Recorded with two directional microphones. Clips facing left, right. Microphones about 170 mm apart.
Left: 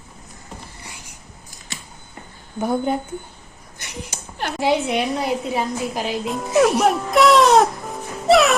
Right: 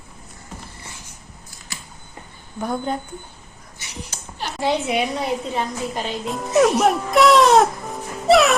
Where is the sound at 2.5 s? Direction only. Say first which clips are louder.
Left 4 dB; 25° left (ahead or behind).